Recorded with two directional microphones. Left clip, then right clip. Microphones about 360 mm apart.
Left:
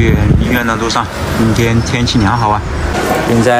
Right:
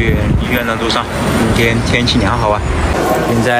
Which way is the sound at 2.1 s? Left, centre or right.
Centre.